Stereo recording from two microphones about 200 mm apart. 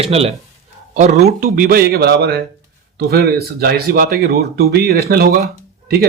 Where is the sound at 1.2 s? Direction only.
45° right (ahead or behind).